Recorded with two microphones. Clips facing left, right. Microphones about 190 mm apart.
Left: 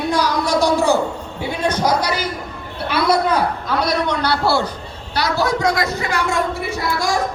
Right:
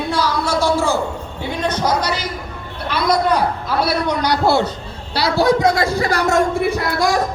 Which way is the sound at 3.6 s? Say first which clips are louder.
Right 1 dB; 10° right (ahead or behind).